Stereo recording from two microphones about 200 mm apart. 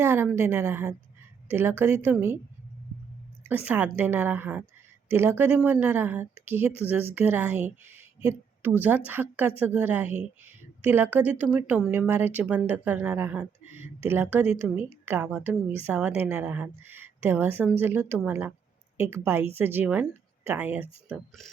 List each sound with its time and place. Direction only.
0.0 s a woman's voice: 10° right (ahead or behind)
3.5 s a woman's voice: 10° right (ahead or behind)
8.2 s a sound: 15° right (ahead or behind)
8.8 s a woman's voice: 10° right (ahead or behind)